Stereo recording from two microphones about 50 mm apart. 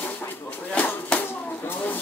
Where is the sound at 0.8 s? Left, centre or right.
Left.